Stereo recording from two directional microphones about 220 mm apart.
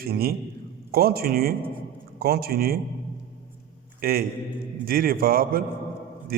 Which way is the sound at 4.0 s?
40° right (ahead or behind).